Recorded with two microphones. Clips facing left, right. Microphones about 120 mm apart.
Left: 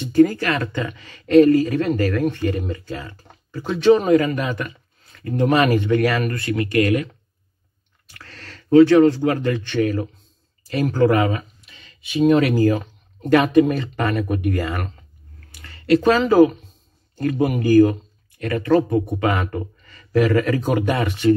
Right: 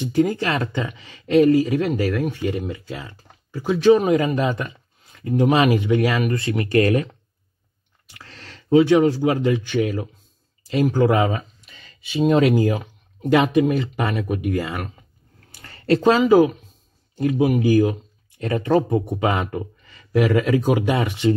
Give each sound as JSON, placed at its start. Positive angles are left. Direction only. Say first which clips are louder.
{"t": 0.0, "sound": "speech", "louder": "left 4 dB", "side_deg": -15}
{"t": 4.1, "sound": "speech", "louder": "left 2 dB", "side_deg": -20}
{"t": 4.5, "sound": "a sound", "louder": "right 2 dB", "side_deg": -25}
{"t": 5.4, "sound": "speech", "louder": "even", "side_deg": -15}
{"t": 6.3, "sound": "speech", "louder": "right 1 dB", "side_deg": -25}
{"t": 8.1, "sound": "speech", "louder": "left 1 dB", "side_deg": -15}
{"t": 12.6, "sound": "speech", "louder": "left 4 dB", "side_deg": -15}
{"t": 15.4, "sound": "a sound", "louder": "right 3 dB", "side_deg": -35}
{"t": 16.0, "sound": "speech", "louder": "even", "side_deg": -15}
{"t": 18.4, "sound": "speech", "louder": "left 1 dB", "side_deg": -25}